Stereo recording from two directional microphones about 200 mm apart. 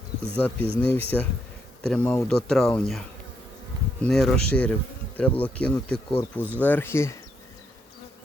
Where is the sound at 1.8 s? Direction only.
5° left (ahead or behind).